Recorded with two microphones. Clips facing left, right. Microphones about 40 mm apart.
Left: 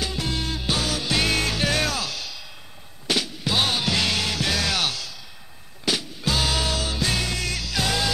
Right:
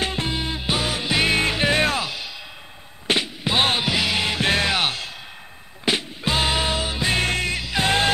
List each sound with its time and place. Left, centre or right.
0.0 s music: right
0.3 s music: right
3.8 s music: centre
7.2 s music: right